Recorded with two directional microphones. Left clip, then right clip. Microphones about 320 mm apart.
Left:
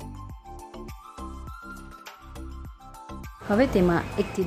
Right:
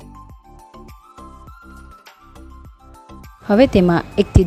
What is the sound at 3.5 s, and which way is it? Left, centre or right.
Speech, right.